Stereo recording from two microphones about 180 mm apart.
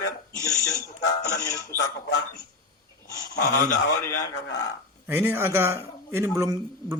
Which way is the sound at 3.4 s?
50° left (ahead or behind).